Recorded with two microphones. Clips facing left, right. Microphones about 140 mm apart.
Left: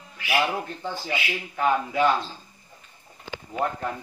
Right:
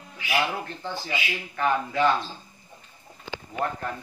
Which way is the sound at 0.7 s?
10° left (ahead or behind).